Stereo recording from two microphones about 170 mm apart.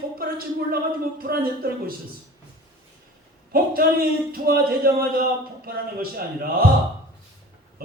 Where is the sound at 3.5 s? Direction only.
60° right (ahead or behind).